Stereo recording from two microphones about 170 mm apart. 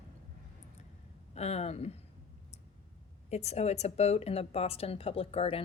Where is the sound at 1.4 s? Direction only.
40° left (ahead or behind).